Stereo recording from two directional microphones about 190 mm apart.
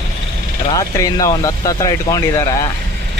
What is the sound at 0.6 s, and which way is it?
Speech, 20° left (ahead or behind).